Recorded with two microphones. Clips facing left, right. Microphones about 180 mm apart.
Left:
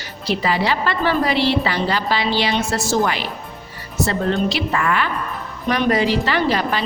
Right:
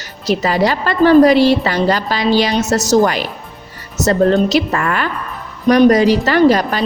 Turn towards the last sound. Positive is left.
turn(degrees=-45)  # may be behind; listen again after turning